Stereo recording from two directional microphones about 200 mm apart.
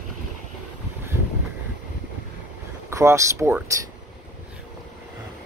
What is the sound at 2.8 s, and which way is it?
Speech, 15° right (ahead or behind).